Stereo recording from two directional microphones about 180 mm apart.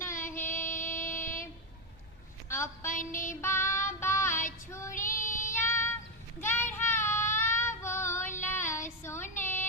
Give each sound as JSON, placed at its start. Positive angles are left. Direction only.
{"t": 0.0, "sound": "music", "side_deg": 15}
{"t": 0.3, "sound": "music", "side_deg": 45}
{"t": 2.8, "sound": "a sound", "side_deg": 45}
{"t": 3.2, "sound": "child singing", "side_deg": 15}
{"t": 4.9, "sound": "child singing", "side_deg": 45}
{"t": 5.5, "sound": "child singing", "side_deg": 15}
{"t": 9.0, "sound": "female singing", "side_deg": 15}
{"t": 9.4, "sound": "a sound", "side_deg": 10}